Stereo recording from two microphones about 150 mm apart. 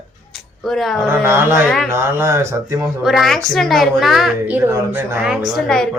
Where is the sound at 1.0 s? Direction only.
15° right (ahead or behind).